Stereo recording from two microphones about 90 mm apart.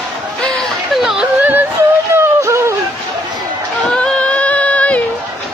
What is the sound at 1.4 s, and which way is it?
Music, 20° right (ahead or behind).